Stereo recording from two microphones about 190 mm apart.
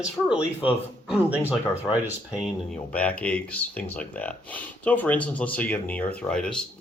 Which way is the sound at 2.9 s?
5° left (ahead or behind).